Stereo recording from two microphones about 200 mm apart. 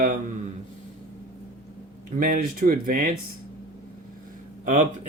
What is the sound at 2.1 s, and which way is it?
Speech, 45° right (ahead or behind).